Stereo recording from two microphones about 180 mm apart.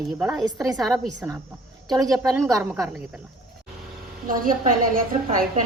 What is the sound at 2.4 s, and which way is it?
Speech, 15° right (ahead or behind).